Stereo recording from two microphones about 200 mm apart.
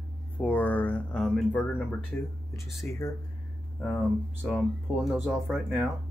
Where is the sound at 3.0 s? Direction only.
15° left (ahead or behind).